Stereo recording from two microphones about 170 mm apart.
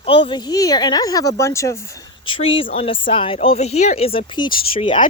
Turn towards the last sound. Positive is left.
turn(degrees=35)  # may be behind; listen again after turning